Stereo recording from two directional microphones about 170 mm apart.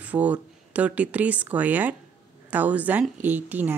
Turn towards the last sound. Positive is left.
turn(degrees=-10)  # may be behind; listen again after turning